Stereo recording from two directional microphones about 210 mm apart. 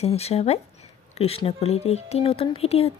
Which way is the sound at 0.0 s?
30° left (ahead or behind).